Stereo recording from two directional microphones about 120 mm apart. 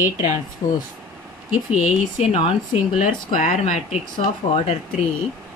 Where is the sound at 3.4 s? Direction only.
65° left (ahead or behind).